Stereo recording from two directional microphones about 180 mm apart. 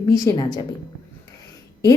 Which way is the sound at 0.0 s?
20° left (ahead or behind).